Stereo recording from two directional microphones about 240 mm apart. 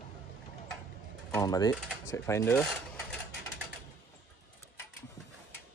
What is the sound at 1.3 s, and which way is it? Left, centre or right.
Speech, centre.